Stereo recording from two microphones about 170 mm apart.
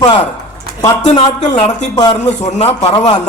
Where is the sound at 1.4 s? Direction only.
40° left (ahead or behind).